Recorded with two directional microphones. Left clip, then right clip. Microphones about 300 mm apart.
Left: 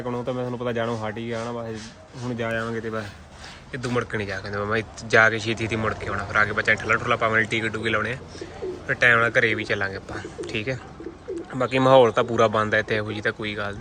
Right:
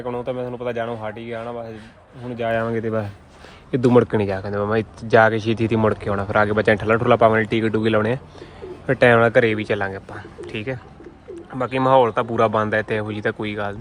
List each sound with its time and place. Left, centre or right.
0.0 s a man's voice: centre
2.4 s speech: centre